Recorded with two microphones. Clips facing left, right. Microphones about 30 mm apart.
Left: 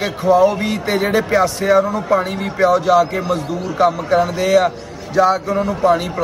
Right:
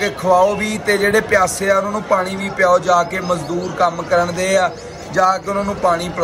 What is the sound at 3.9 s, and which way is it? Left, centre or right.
A man's voice, left.